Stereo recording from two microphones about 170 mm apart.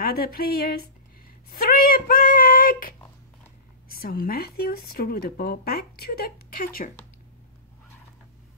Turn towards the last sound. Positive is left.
turn(degrees=60)  # may be behind; listen again after turning